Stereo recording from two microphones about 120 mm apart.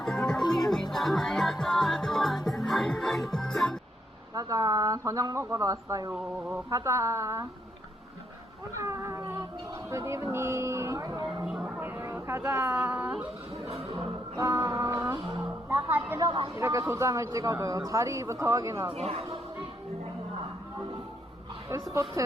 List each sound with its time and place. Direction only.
0.0 s music: 5° left (ahead or behind)
4.4 s speech: 30° right (ahead or behind)
8.8 s speech: 25° right (ahead or behind)
9.9 s a sound: 25° right (ahead or behind)
11.4 s a sound: 5° right (ahead or behind)
14.3 s music: 25° right (ahead or behind)
16.0 s speech: 20° right (ahead or behind)